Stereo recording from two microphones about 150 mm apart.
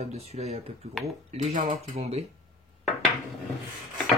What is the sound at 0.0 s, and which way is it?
Speech, 45° right (ahead or behind).